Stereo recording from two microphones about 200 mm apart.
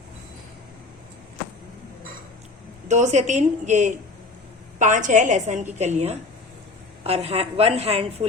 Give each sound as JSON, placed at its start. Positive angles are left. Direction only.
{"t": 2.9, "sound": "a woman's voice", "side_deg": -35}